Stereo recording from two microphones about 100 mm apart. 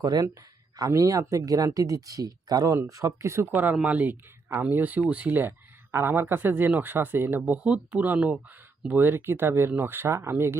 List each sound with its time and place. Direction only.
0.0 s speech: 40° right (ahead or behind); by 10.6 s 25° right (ahead or behind)